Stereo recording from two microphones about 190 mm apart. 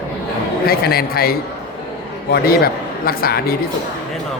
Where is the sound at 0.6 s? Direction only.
55° left (ahead or behind).